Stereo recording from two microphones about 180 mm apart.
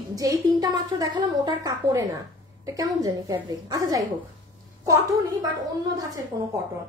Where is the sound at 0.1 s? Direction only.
20° right (ahead or behind).